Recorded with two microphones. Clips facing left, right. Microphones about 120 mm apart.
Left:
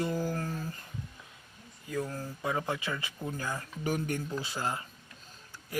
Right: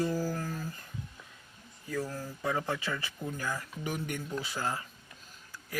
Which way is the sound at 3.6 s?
40° left (ahead or behind).